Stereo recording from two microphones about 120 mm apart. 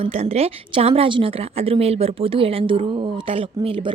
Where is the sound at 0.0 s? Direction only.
60° right (ahead or behind).